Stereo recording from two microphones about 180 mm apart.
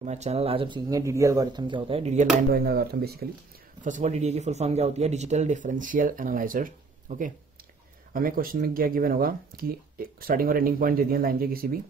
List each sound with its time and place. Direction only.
0.0 s speech: 40° right (ahead or behind)
2.5 s speech: 60° right (ahead or behind)
3.8 s speech: 40° right (ahead or behind)